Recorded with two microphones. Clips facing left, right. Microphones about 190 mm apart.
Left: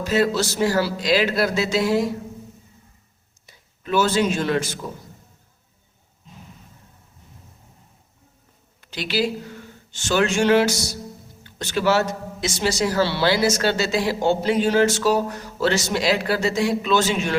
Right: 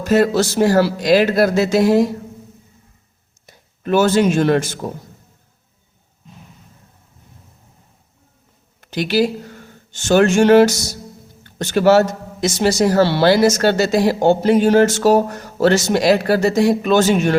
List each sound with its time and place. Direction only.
0.0 s a man's voice: 50° right (ahead or behind)
3.4 s speech: 50° right (ahead or behind)
8.8 s a man's voice: 50° right (ahead or behind)